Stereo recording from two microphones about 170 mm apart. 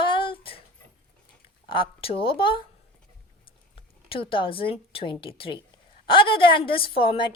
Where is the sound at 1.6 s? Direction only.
30° left (ahead or behind).